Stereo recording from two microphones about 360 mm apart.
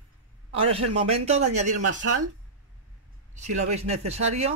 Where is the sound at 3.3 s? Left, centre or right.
Centre.